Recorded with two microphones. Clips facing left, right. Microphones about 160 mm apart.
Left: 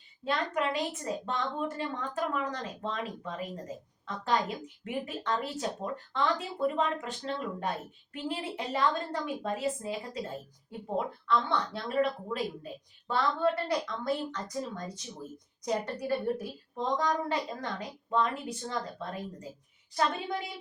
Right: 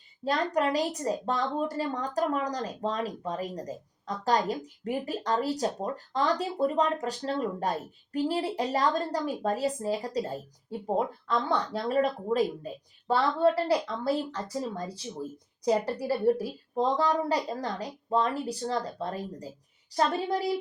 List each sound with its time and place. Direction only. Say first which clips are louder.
0.3 s speech: right 4 dB; 40° right (ahead or behind)